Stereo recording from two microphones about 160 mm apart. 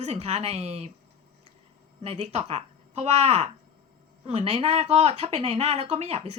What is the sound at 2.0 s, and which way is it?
A woman's voice, 40° right (ahead or behind).